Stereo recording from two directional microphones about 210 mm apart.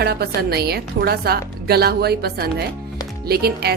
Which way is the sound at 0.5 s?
50° right (ahead or behind).